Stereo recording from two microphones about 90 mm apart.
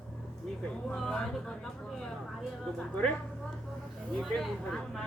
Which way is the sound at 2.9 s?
15° left (ahead or behind).